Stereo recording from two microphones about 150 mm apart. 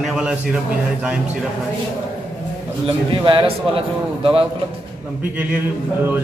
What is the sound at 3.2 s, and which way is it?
Speech, 35° right (ahead or behind).